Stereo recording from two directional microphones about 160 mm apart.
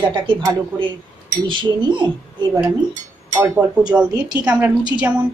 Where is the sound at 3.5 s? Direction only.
5° right (ahead or behind).